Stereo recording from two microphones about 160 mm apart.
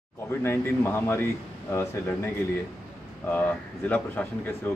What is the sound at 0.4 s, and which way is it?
Speech, 15° left (ahead or behind).